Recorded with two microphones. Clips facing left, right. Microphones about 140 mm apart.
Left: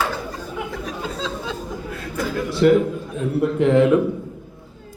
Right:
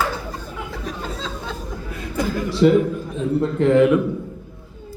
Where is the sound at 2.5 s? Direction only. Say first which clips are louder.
Even; centre (ahead or behind).